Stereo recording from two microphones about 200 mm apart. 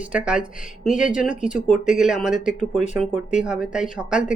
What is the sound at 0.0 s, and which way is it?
A woman's voice, 5° right (ahead or behind).